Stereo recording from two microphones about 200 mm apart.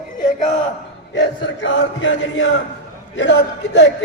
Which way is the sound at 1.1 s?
65° left (ahead or behind).